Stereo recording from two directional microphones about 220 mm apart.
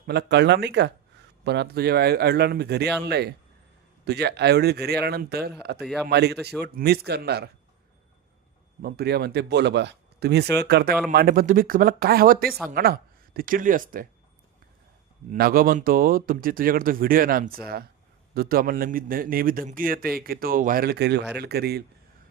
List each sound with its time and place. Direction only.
0.1 s speech: 50° right (ahead or behind)
5.8 s a man's voice: centre (ahead or behind)
6.1 s speech: 50° right (ahead or behind)
8.8 s speech: 45° right (ahead or behind)
15.3 s speech: 40° right (ahead or behind)